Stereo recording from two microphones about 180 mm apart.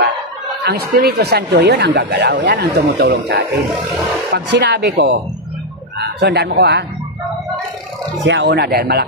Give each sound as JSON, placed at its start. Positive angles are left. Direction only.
{"t": 0.7, "sound": "speech", "side_deg": -60}
{"t": 4.3, "sound": "speech", "side_deg": -75}
{"t": 8.3, "sound": "speech", "side_deg": -75}